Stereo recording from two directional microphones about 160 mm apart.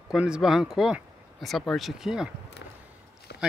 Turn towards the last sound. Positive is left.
turn(degrees=90)